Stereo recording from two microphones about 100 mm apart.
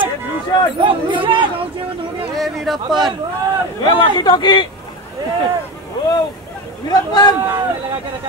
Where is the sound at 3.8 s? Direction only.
50° left (ahead or behind).